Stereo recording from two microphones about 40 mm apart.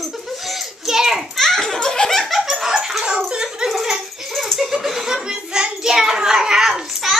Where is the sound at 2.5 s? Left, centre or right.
Centre.